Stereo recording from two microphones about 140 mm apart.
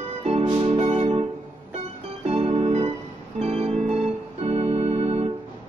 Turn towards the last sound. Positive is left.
turn(degrees=-45)  # may be behind; listen again after turning